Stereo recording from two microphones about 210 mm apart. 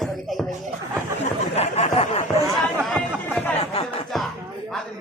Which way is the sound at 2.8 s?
5° left (ahead or behind).